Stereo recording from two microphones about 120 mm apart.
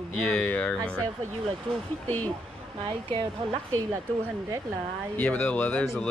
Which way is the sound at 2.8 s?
45° right (ahead or behind).